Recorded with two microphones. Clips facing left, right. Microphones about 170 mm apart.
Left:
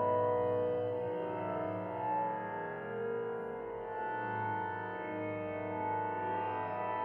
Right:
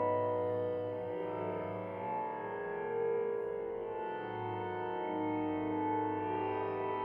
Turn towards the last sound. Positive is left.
turn(degrees=65)  # may be behind; listen again after turning